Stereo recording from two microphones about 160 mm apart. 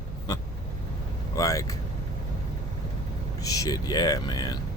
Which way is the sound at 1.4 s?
20° left (ahead or behind).